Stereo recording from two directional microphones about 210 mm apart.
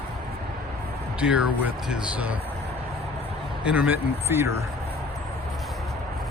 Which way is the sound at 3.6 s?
5° right (ahead or behind).